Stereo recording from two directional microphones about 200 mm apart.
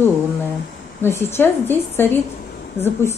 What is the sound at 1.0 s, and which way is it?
A woman's voice, 10° left (ahead or behind).